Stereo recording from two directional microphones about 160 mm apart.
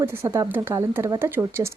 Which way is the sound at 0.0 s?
15° right (ahead or behind).